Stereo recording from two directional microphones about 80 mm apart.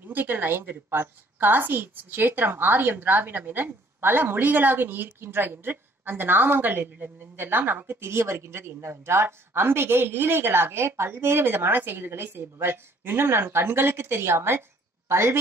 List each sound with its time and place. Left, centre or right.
0.0 s a woman's voice: right